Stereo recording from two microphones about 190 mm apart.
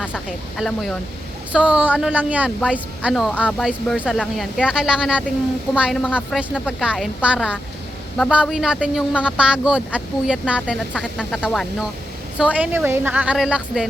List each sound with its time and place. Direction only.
0.3 s speech: centre (ahead or behind)